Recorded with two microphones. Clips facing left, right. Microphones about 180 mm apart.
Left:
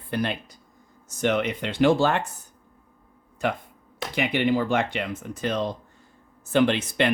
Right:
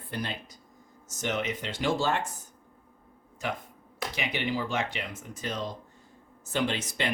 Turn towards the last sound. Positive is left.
turn(degrees=60)  # may be behind; listen again after turning